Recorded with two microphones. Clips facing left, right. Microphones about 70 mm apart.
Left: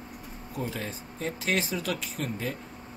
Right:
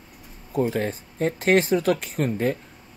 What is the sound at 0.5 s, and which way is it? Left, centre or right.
Speech, right.